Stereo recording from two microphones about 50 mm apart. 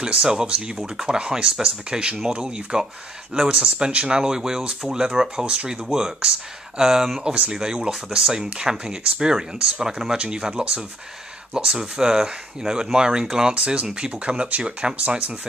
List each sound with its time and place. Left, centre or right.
0.0 s speech: centre